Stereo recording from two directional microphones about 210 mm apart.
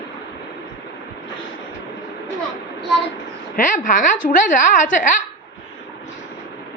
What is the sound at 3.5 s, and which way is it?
A woman's voice, 40° left (ahead or behind).